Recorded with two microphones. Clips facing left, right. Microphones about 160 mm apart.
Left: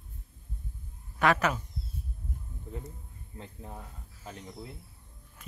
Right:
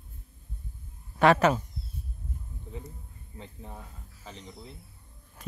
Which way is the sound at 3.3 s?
5° left (ahead or behind).